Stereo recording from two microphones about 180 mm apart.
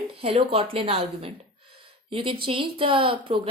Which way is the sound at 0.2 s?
30° right (ahead or behind).